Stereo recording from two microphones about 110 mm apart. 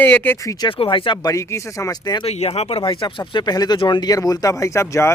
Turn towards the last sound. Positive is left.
turn(degrees=25)  # may be behind; listen again after turning